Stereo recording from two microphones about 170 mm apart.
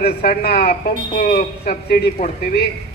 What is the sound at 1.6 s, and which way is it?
A woman's voice, 70° left (ahead or behind).